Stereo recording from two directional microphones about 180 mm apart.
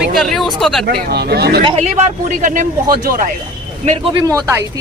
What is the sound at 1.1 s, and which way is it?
Speech, 60° right (ahead or behind).